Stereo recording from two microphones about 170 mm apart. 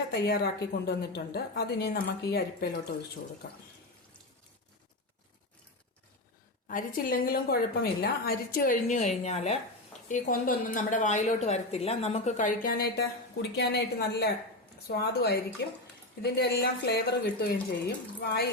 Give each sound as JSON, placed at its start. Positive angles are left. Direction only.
{"t": 0.1, "sound": "a woman's voice", "side_deg": 70}
{"t": 6.7, "sound": "a woman's voice", "side_deg": 55}
{"t": 13.6, "sound": "a woman's voice", "side_deg": 75}